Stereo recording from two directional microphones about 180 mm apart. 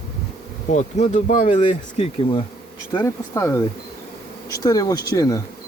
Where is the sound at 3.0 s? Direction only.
15° left (ahead or behind).